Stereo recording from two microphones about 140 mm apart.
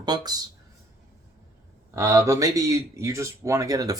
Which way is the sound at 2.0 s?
25° right (ahead or behind).